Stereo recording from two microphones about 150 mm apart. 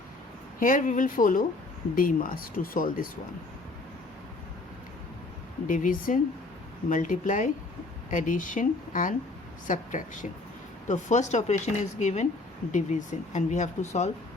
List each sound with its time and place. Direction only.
0.6 s speech: 60° left (ahead or behind)
5.6 s speech: 60° left (ahead or behind)